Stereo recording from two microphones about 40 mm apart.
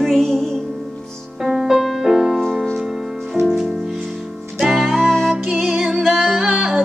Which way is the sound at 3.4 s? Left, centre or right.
Centre.